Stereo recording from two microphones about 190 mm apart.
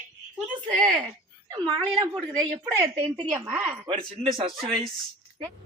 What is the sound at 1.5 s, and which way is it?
A woman's voice, 20° right (ahead or behind).